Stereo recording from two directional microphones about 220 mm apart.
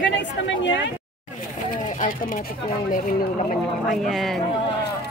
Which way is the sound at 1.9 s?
40° left (ahead or behind).